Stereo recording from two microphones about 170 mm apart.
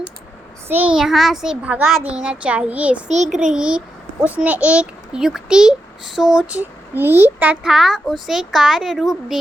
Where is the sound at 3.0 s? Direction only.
45° right (ahead or behind).